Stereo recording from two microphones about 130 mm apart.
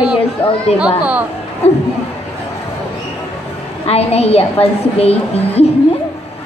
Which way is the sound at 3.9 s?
50° left (ahead or behind).